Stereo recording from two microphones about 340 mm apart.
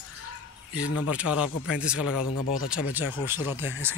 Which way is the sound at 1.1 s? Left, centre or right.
Centre.